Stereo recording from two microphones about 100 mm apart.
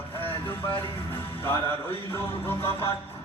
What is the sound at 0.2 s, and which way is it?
Music, 20° left (ahead or behind).